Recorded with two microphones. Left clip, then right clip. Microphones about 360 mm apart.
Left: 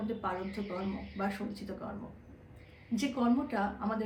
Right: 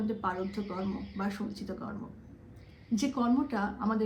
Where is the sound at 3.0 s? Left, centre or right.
Centre.